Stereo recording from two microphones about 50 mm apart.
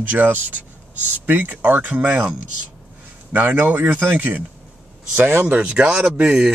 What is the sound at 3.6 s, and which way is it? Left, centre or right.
Speech, right.